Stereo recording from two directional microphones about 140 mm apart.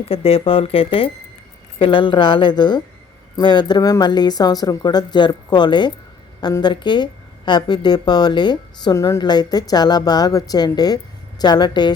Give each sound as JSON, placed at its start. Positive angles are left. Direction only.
{"t": 0.1, "sound": "speech", "side_deg": 45}